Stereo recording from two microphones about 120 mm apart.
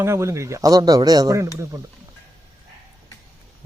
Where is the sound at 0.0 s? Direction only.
25° right (ahead or behind).